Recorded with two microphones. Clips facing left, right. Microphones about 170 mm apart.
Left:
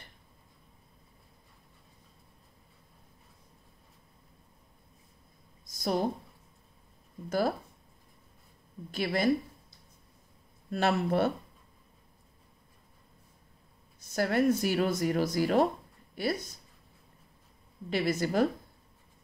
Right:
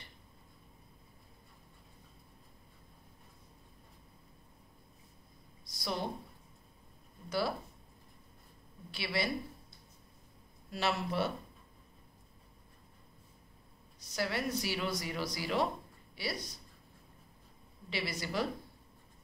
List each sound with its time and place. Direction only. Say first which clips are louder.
5.7 s a sound: left 8 dB; 45° left (ahead or behind)
7.2 s speech: left 5 dB; 45° left (ahead or behind)
8.9 s speech: left 7 dB; 45° left (ahead or behind)
10.7 s speech: left 7 dB; 50° left (ahead or behind)
13.9 s speech: left 8 dB; 50° left (ahead or behind)
17.8 s speech: left 10 dB; 50° left (ahead or behind)